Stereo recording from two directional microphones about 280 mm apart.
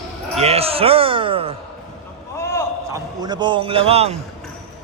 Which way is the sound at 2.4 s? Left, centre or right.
Centre.